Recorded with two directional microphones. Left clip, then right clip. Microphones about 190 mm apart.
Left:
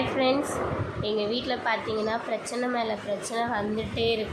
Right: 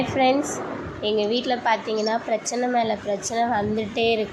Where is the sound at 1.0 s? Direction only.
20° right (ahead or behind).